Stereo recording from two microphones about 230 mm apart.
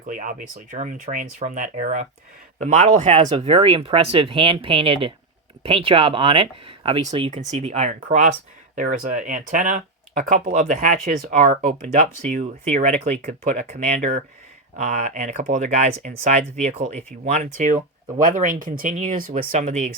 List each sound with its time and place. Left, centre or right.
0.1 s speech: right